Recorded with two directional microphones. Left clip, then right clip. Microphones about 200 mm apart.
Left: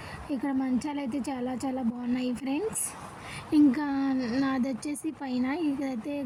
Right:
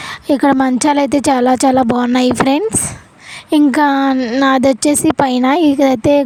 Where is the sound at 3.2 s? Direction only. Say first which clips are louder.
Right 11 dB; 50° right (ahead or behind).